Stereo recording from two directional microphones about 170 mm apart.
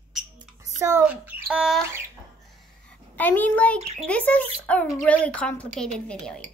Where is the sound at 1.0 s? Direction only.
5° right (ahead or behind).